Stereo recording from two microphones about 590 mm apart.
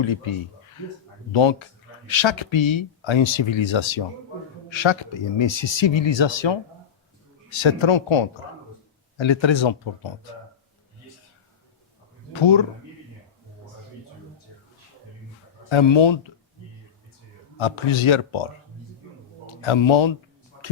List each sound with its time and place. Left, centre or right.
0.0 s speech: left
12.3 s speech: left
15.7 s speech: left
17.6 s speech: left
19.5 s speech: left